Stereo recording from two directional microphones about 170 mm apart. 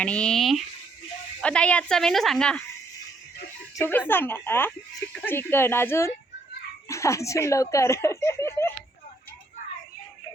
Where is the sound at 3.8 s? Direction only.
10° left (ahead or behind).